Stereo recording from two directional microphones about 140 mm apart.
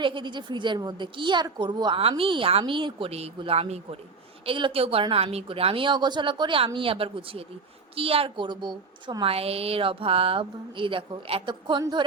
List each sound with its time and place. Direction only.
0.0 s a woman's voice: 35° right (ahead or behind)